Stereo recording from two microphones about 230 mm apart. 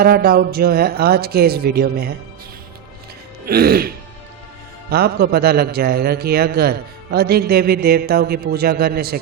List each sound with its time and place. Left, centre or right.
0.0 s speech: right
3.4 s a man's voice: right